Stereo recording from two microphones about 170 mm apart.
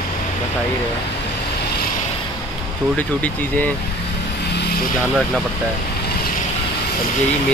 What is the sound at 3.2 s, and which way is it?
Speech, 10° left (ahead or behind).